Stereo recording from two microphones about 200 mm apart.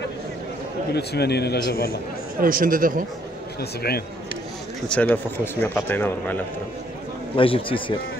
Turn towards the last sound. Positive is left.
turn(degrees=25)  # may be behind; listen again after turning